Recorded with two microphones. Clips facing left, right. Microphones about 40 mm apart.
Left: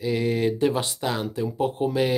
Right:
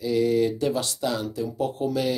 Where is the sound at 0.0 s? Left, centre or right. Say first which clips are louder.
Right 2 dB; left.